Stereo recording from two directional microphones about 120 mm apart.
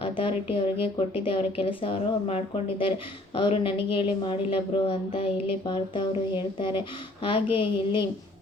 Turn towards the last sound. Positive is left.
turn(degrees=45)  # may be behind; listen again after turning